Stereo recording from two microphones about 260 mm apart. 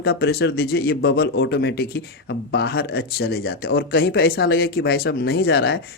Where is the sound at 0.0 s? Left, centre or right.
Left.